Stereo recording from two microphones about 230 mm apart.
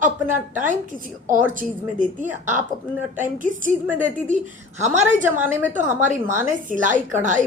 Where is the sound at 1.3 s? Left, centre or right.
Right.